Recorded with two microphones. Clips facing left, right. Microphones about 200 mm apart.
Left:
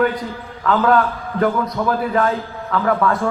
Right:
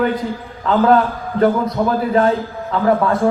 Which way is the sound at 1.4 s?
30° right (ahead or behind).